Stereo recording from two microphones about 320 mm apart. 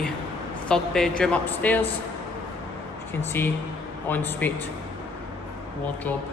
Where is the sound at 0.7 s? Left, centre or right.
Centre.